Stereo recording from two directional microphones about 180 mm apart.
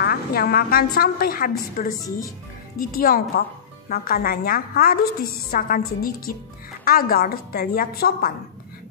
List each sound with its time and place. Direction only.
0.0 s a woman's voice: 60° left (ahead or behind)
2.0 s speech: 20° left (ahead or behind)
2.8 s a woman's voice: 55° left (ahead or behind)